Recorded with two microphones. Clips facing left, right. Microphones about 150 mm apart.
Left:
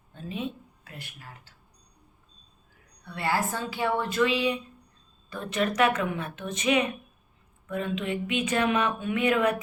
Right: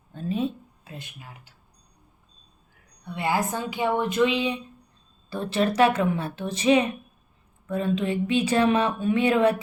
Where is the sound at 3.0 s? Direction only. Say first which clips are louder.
Right 2 dB; 15° right (ahead or behind).